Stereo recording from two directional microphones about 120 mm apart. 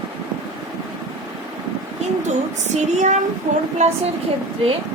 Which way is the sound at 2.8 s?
80° right.